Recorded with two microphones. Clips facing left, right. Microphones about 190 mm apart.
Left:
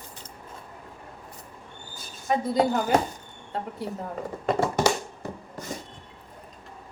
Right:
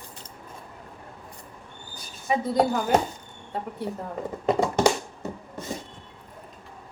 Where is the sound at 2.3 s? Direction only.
Centre (ahead or behind).